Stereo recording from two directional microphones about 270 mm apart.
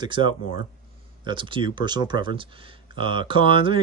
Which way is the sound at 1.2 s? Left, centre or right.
Centre.